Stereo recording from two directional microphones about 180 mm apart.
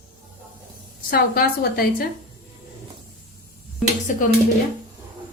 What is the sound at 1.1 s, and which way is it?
Speech, 55° left (ahead or behind).